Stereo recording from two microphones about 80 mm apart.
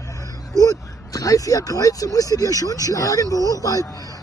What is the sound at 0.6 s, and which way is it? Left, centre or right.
Speech, left.